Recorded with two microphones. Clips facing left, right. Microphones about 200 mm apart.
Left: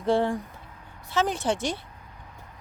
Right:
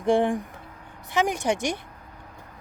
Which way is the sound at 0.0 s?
15° right (ahead or behind).